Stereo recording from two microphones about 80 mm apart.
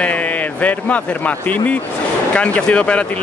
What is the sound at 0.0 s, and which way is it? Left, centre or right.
Speech, centre.